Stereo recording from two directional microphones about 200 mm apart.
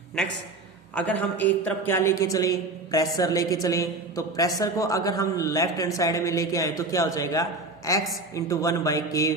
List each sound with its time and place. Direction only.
0.9 s a woman's voice: 5° left (ahead or behind)